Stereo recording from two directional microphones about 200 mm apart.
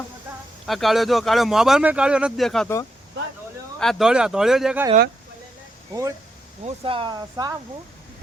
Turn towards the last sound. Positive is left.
turn(degrees=-20)  # may be behind; listen again after turning